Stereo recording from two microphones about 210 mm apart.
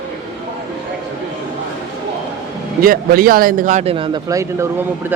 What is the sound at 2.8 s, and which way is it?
Speech, 45° right (ahead or behind).